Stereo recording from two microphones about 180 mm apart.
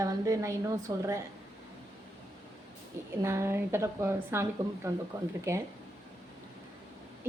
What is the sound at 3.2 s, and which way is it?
A woman's voice, 15° right (ahead or behind).